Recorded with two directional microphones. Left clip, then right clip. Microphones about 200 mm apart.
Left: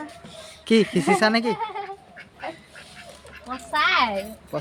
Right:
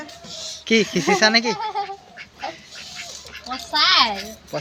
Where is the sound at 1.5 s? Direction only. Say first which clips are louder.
Right 4 dB; 35° left (ahead or behind).